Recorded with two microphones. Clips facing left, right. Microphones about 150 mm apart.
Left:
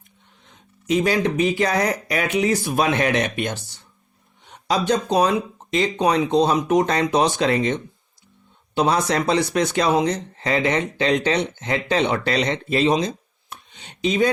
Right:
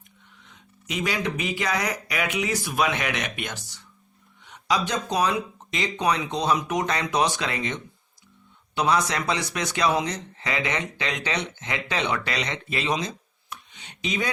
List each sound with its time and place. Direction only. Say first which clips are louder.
0.5 s speech: left 11 dB; 35° left (ahead or behind)